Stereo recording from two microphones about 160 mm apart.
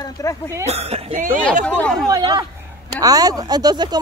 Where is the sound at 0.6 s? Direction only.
40° right (ahead or behind).